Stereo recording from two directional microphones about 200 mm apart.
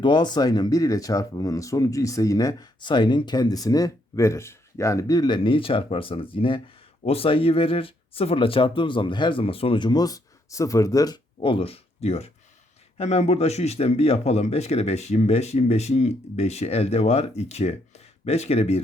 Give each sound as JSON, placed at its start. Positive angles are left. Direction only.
{"t": 0.0, "sound": "speech", "side_deg": 20}